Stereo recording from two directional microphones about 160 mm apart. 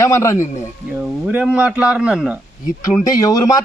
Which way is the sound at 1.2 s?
5° right (ahead or behind).